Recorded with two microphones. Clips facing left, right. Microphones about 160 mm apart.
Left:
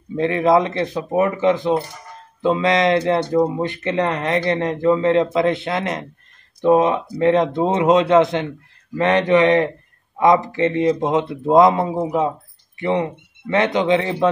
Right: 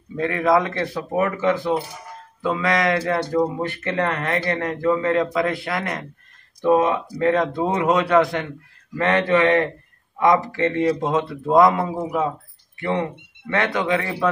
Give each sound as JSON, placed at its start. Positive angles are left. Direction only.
{"t": 0.1, "sound": "speech", "side_deg": 25}